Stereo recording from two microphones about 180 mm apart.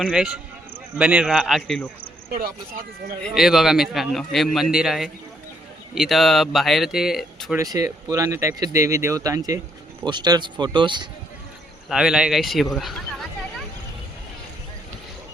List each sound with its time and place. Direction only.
0.0 s a man's voice: 5° right (ahead or behind)
3.2 s a man's voice: centre (ahead or behind)
7.5 s speech: 20° right (ahead or behind)
11.9 s a man's voice: 5° right (ahead or behind)